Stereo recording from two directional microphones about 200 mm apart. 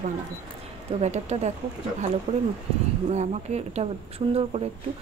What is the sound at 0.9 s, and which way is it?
Speech, 35° right (ahead or behind).